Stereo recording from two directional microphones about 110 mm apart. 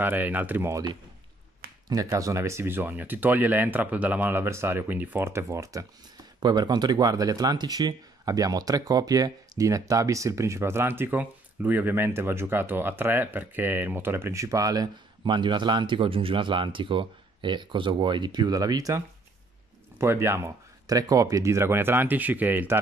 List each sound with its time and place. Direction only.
0.0 s speech: 15° right (ahead or behind)
1.9 s speech: 30° right (ahead or behind)
6.4 s speech: 40° right (ahead or behind); by 22.8 s 15° right (ahead or behind)